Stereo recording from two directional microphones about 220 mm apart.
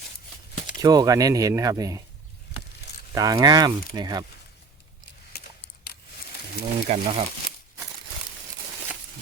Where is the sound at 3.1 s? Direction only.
15° right (ahead or behind).